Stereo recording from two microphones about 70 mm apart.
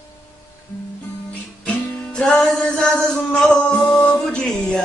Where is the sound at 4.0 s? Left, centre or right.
Centre.